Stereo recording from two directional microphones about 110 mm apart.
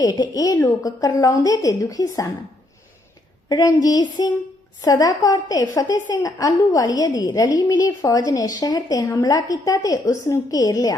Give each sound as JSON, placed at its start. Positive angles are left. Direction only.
{"t": 0.0, "sound": "a woman's voice", "side_deg": 35}
{"t": 3.5, "sound": "a woman's voice", "side_deg": 35}